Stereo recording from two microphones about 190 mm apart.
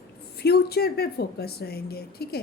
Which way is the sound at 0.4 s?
55° left (ahead or behind).